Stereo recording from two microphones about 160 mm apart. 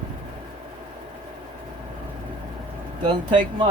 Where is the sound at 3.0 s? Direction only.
30° right (ahead or behind).